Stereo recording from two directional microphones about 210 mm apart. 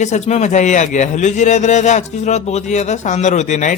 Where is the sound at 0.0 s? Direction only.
35° left (ahead or behind).